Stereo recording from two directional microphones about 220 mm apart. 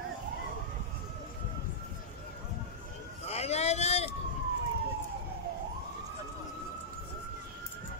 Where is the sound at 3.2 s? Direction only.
30° left (ahead or behind).